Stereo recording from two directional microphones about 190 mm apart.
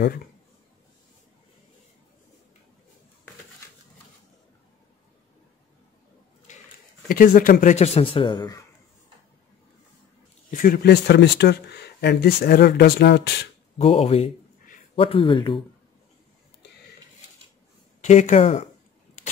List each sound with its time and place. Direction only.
7.1 s speech: 45° left (ahead or behind); by 8.6 s 20° left (ahead or behind)
10.5 s speech: 45° left (ahead or behind)
13.7 s speech: 35° left (ahead or behind)
18.0 s speech: 40° left (ahead or behind)